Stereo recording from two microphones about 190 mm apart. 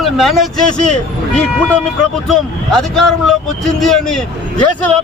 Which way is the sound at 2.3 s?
Centre (ahead or behind).